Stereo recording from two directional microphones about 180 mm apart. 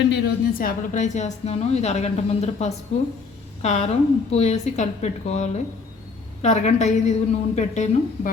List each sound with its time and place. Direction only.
0.1 s a woman's voice: 60° left (ahead or behind); by 8.3 s 40° left (ahead or behind)